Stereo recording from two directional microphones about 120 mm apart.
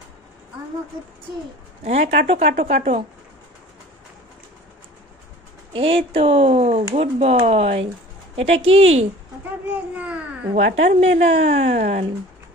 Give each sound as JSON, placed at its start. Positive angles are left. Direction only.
{"t": 1.9, "sound": "speech", "side_deg": -75}
{"t": 5.7, "sound": "speech", "side_deg": -50}
{"t": 9.7, "sound": "babbling", "side_deg": -15}
{"t": 10.5, "sound": "speech", "side_deg": -75}